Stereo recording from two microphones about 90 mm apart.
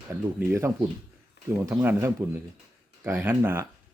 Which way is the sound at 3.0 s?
25° right (ahead or behind).